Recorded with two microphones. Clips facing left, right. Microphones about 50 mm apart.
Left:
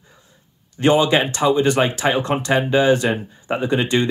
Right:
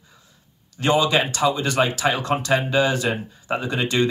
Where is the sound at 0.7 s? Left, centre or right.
Left.